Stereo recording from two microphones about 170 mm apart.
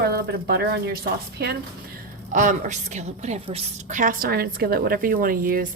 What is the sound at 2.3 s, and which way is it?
Speech, 45° right (ahead or behind).